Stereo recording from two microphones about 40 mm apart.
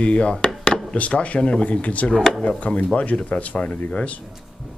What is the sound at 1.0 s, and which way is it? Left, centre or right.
Speech, left.